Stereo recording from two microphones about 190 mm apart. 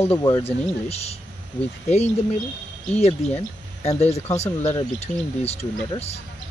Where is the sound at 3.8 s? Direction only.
35° left (ahead or behind).